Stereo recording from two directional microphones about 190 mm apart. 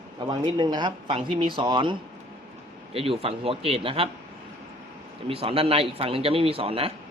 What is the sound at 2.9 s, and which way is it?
Speech, 30° right (ahead or behind).